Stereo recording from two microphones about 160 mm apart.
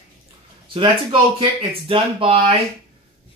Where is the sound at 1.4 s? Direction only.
35° right (ahead or behind).